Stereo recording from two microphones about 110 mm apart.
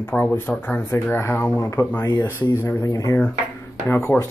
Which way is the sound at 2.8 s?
30° left (ahead or behind).